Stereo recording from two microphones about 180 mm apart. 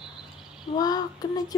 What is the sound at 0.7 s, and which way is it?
Speech, 20° left (ahead or behind).